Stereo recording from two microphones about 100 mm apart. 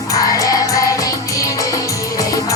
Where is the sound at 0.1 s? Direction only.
35° left (ahead or behind).